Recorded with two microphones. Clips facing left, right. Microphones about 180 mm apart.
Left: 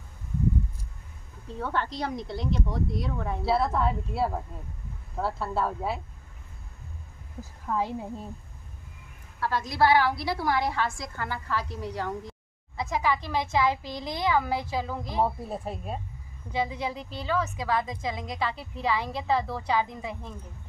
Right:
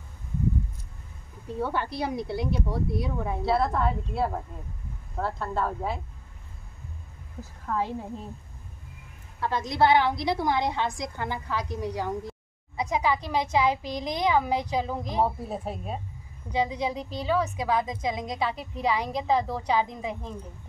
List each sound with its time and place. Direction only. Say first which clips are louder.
1.5 s a woman's voice: right 2 dB; 10° right (ahead or behind)
3.4 s a woman's voice: even; 5° left (ahead or behind)
7.6 s a woman's voice: even; 10° left (ahead or behind)
9.4 s a woman's voice: right 1 dB; 20° right (ahead or behind)
15.2 s a woman's voice: right 1 dB; centre (ahead or behind)
16.5 s a woman's voice: right 3 dB; 15° right (ahead or behind)